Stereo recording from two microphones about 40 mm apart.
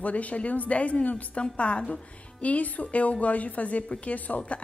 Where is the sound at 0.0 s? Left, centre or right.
Left.